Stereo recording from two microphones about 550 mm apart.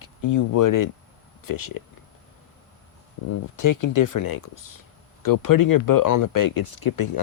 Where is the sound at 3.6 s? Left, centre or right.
Left.